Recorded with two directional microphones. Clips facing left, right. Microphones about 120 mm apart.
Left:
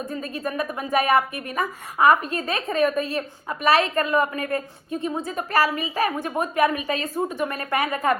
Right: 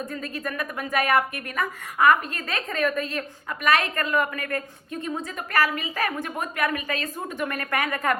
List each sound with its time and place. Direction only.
0.1 s a woman's voice: 20° left (ahead or behind)
5.7 s a woman's voice: 15° left (ahead or behind)